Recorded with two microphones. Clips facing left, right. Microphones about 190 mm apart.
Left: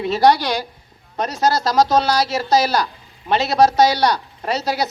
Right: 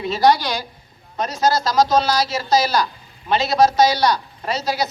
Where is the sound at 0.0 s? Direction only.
60° left (ahead or behind).